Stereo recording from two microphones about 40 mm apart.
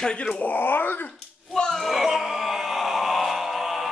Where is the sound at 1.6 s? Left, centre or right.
Centre.